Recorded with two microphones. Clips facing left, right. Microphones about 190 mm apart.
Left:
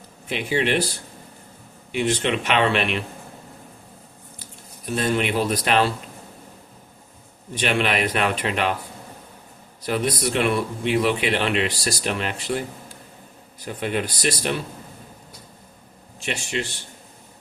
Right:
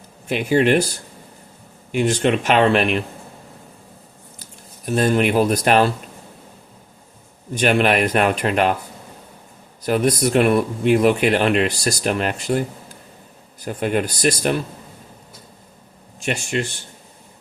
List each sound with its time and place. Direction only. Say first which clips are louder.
0.3 s speech: right 6 dB; 45° right (ahead or behind)
1.9 s speech: right 4 dB; 45° right (ahead or behind)
4.9 s speech: right 6 dB; 45° right (ahead or behind)
7.5 s speech: right 6 dB; 45° right (ahead or behind)
9.8 s speech: right 5 dB; 45° right (ahead or behind)
13.7 s speech: right 5 dB; 45° right (ahead or behind)
16.2 s speech: right 5 dB; 45° right (ahead or behind)